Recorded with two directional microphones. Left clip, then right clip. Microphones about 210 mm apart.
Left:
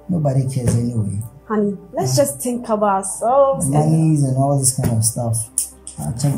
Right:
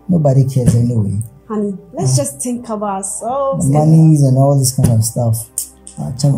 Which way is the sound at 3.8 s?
30° right (ahead or behind).